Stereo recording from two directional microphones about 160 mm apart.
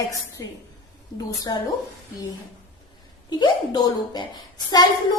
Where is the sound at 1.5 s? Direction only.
25° left (ahead or behind).